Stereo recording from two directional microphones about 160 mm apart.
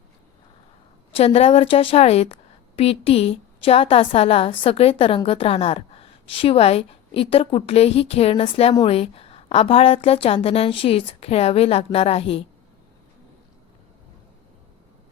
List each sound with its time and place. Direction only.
1.1 s a woman's voice: 40° left (ahead or behind)